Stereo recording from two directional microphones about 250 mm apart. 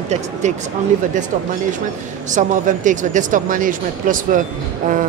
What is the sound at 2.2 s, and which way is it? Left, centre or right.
Speech, right.